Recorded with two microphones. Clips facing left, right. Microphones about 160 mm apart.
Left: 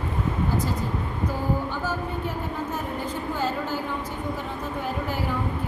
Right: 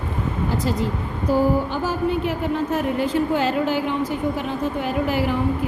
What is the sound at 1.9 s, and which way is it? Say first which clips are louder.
A woman's voice: right 7 dB; 90° right.